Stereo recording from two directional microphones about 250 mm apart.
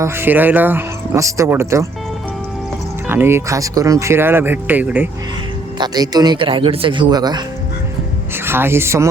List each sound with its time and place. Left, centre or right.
0.0 s speech: centre
3.1 s speech: centre
8.4 s speech: centre